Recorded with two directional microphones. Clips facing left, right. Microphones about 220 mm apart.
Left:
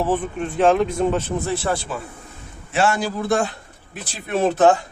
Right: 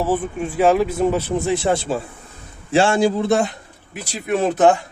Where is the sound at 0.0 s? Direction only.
5° right (ahead or behind).